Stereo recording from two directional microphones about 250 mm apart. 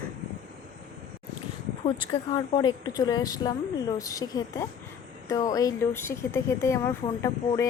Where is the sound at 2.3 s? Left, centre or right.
Centre.